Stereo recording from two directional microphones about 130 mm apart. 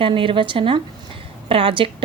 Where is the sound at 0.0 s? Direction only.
40° right (ahead or behind).